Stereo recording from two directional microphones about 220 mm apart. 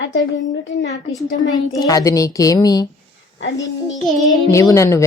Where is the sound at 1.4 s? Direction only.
15° left (ahead or behind).